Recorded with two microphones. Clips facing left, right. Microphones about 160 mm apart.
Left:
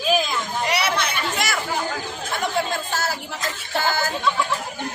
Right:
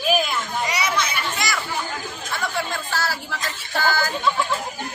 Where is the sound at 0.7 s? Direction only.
60° left (ahead or behind).